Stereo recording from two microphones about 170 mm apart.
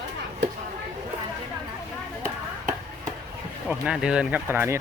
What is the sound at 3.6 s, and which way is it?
Speech, 5° right (ahead or behind).